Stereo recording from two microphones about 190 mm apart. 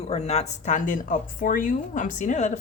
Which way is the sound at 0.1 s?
35° left (ahead or behind).